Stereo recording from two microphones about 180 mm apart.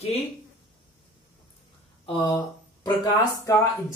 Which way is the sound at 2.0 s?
25° left (ahead or behind).